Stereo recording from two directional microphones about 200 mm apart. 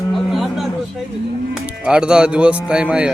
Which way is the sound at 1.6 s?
5° right (ahead or behind).